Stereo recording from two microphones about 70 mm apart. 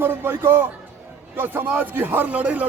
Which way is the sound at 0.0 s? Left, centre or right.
Right.